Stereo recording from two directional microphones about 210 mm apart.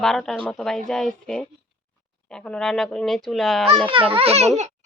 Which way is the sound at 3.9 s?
25° right (ahead or behind).